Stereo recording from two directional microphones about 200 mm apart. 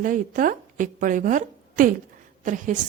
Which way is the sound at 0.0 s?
40° right (ahead or behind).